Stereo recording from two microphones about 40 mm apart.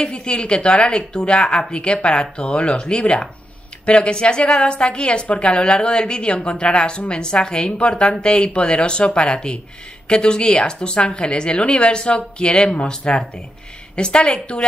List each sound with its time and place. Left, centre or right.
0.0 s a woman's voice: left